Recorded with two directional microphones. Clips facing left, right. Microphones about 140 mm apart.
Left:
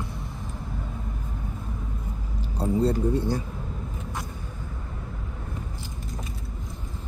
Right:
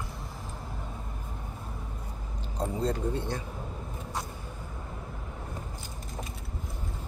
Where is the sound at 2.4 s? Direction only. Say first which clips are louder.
Left 7 dB; 10° left (ahead or behind).